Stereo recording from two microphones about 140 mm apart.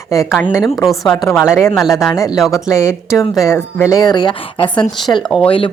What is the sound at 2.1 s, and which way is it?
A woman's voice, 25° left (ahead or behind).